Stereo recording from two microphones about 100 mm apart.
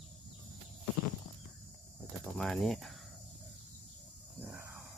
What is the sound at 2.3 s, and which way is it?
Speech, 5° left (ahead or behind).